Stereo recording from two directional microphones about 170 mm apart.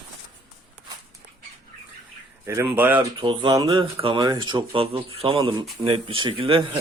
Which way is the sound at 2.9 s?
30° right (ahead or behind).